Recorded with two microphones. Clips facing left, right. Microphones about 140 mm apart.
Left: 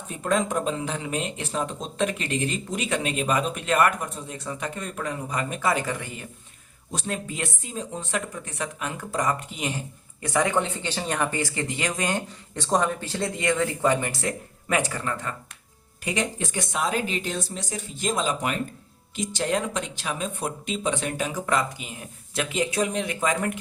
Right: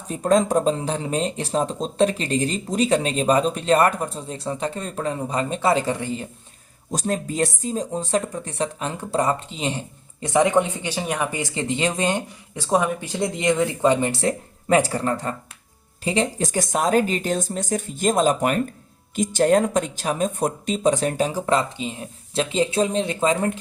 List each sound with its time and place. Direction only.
0.1 s speech: 35° right (ahead or behind)
6.9 s speech: 40° right (ahead or behind); by 12.2 s 25° right (ahead or behind)
12.5 s speech: 10° right (ahead or behind); by 23.6 s 30° right (ahead or behind)